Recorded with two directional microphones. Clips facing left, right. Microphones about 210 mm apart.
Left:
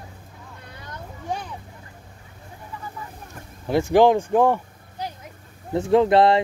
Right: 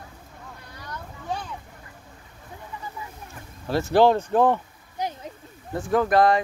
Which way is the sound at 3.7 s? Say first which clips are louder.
Left 2 dB; 15° left (ahead or behind).